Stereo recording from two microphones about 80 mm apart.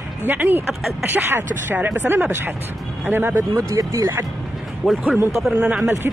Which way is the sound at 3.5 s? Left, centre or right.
Right.